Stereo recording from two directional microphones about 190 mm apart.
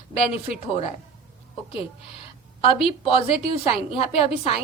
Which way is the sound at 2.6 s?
30° left (ahead or behind).